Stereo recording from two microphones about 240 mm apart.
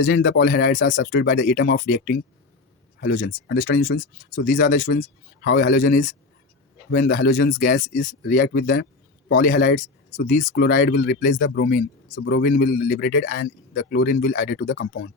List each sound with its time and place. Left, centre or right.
0.0 s speech: left
4.6 s speech: left
5.7 s speech: left
7.3 s speech: left
8.3 s speech: left